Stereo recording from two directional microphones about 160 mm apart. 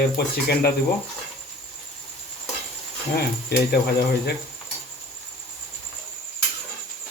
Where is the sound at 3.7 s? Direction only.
75° left (ahead or behind).